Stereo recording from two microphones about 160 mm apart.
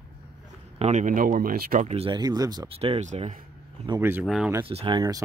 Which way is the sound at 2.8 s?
45° right (ahead or behind).